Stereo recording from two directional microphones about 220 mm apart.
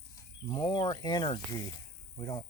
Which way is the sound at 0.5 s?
20° left (ahead or behind).